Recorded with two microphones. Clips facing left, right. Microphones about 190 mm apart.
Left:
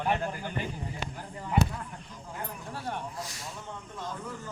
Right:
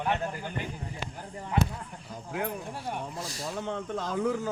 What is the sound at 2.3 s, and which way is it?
Speech, 80° right.